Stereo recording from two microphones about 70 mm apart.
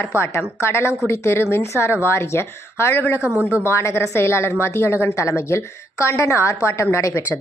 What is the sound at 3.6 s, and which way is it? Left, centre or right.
A woman's voice, left.